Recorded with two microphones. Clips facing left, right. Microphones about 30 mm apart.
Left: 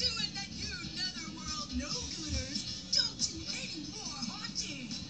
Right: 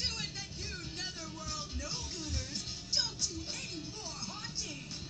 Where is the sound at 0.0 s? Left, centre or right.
Left.